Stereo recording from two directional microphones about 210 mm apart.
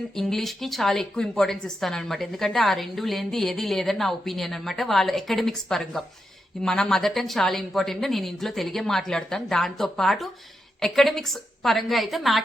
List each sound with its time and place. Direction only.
0.2 s a woman's voice: centre (ahead or behind)